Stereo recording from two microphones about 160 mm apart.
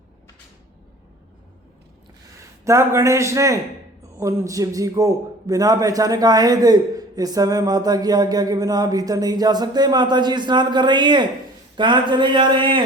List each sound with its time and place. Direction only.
2.6 s a man's voice: 20° right (ahead or behind)